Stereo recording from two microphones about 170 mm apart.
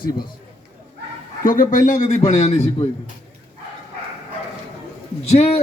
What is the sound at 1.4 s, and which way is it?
A man's voice, 50° left (ahead or behind).